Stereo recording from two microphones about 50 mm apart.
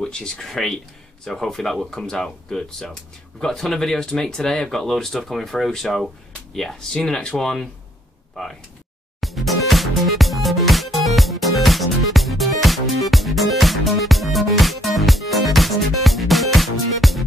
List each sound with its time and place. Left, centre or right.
0.0 s speech: centre
9.2 s music: centre